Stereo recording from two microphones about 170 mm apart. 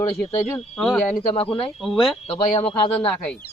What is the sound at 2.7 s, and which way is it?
Speech, 35° left (ahead or behind).